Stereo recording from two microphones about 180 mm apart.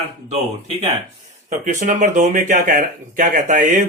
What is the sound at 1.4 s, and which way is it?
Speech, 45° right (ahead or behind).